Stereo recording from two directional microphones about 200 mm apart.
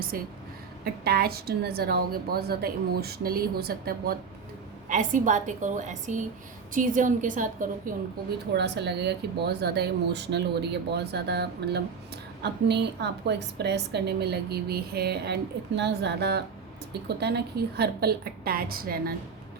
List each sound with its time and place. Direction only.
0.1 s a woman's voice: 45° right (ahead or behind)
8.5 s a woman's voice: 55° right (ahead or behind)